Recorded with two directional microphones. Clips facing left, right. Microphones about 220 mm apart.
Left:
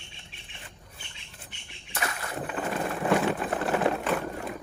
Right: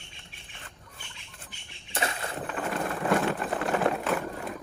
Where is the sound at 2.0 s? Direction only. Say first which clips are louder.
Right 2 dB; 25° right (ahead or behind).